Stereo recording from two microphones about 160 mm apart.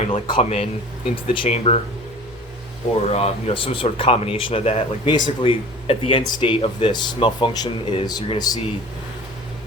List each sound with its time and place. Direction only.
0.1 s speech: 35° left (ahead or behind)
3.1 s speech: 40° left (ahead or behind); by 8.5 s 25° left (ahead or behind)